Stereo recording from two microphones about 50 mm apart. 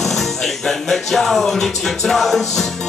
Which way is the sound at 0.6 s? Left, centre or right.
Centre.